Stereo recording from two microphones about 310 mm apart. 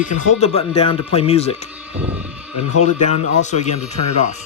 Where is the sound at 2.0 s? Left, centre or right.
Centre.